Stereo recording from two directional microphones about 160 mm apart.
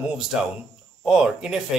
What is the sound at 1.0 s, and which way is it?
Speech, 5° right (ahead or behind).